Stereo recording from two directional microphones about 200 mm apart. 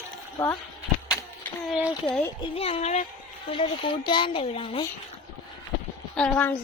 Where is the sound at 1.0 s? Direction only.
15° left (ahead or behind).